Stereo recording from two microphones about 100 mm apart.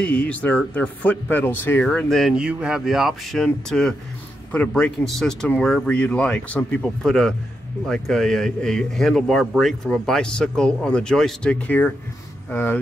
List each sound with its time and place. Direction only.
0.0 s speech: 10° left (ahead or behind)
2.3 s speech: 10° right (ahead or behind); by 12.7 s 20° left (ahead or behind)